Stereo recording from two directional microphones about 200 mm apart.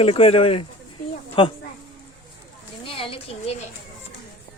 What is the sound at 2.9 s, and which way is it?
Speech, 25° left (ahead or behind).